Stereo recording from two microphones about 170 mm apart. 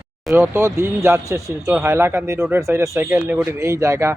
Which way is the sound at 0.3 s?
10° right (ahead or behind).